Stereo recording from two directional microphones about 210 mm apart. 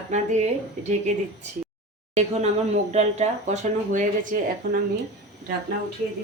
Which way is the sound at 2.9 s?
30° right (ahead or behind).